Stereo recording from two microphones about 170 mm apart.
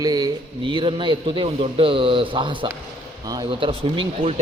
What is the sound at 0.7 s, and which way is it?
Speech, 30° right (ahead or behind).